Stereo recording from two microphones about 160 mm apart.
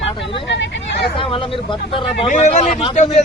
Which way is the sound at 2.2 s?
50° left (ahead or behind).